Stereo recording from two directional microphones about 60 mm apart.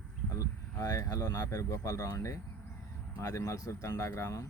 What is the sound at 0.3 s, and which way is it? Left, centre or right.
Speech, left.